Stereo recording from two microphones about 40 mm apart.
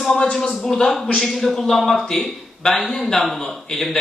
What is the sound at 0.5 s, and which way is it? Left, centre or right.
A woman's voice, centre.